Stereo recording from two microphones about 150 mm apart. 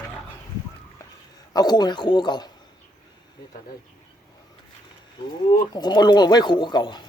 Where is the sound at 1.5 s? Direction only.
25° left (ahead or behind).